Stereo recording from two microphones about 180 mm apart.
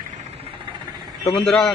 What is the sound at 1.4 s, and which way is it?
Speech, centre (ahead or behind).